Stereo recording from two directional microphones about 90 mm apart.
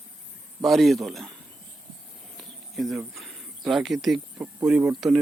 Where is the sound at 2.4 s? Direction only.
Centre (ahead or behind).